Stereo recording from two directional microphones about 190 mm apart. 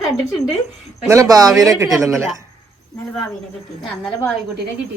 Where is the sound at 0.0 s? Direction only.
Centre (ahead or behind).